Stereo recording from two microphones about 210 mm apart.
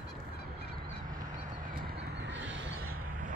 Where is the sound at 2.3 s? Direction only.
60° right (ahead or behind).